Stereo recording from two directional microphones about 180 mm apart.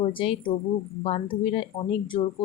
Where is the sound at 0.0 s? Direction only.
30° left (ahead or behind).